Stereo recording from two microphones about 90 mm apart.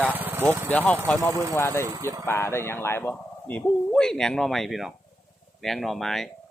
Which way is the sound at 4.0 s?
10° left (ahead or behind).